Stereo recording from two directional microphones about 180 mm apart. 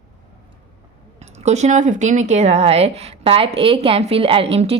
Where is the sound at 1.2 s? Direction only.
40° right (ahead or behind).